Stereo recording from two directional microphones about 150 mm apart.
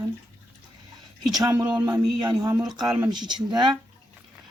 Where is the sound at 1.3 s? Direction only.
25° right (ahead or behind).